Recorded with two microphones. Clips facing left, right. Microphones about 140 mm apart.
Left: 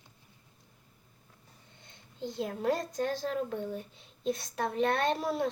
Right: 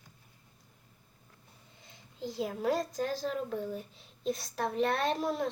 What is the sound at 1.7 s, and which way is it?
A woman's voice, centre (ahead or behind).